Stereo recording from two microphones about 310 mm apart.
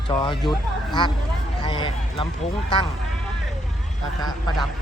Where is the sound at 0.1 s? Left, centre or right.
Centre.